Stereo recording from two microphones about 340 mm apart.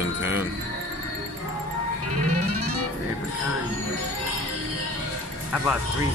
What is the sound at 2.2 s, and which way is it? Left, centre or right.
Music, right.